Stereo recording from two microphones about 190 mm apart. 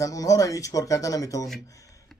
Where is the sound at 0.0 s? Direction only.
15° left (ahead or behind).